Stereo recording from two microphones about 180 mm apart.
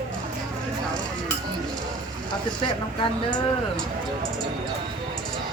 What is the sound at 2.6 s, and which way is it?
Speech, 25° left (ahead or behind).